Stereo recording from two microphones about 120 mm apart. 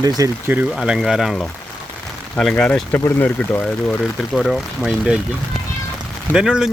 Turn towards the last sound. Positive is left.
turn(degrees=-5)  # may be behind; listen again after turning